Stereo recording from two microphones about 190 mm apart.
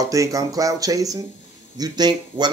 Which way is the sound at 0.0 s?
15° right (ahead or behind).